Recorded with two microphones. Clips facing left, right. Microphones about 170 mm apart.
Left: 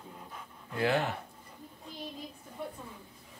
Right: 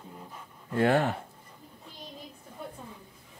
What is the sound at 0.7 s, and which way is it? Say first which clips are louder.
Speech: right 5 dB; 50° right (ahead or behind).